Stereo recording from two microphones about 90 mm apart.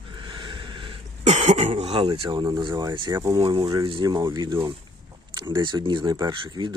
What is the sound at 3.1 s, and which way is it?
Speech, 40° right (ahead or behind).